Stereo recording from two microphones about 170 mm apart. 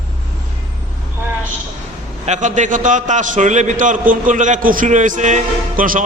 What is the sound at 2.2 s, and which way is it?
A man's voice, 45° right (ahead or behind).